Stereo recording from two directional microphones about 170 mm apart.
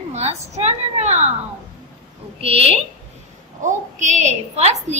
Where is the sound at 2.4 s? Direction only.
35° right (ahead or behind).